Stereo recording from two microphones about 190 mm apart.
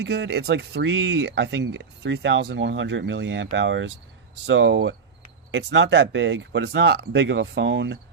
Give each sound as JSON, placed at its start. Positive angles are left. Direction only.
{"t": 0.0, "sound": "speech", "side_deg": -60}